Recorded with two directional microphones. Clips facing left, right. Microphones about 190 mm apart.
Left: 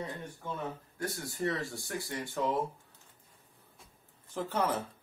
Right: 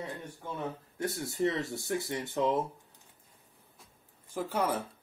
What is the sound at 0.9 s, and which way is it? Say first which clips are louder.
Speech: right 5 dB; 20° right (ahead or behind).